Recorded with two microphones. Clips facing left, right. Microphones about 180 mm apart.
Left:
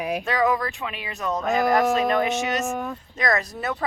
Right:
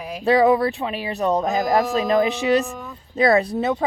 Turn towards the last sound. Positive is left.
turn(degrees=-25)  # may be behind; listen again after turning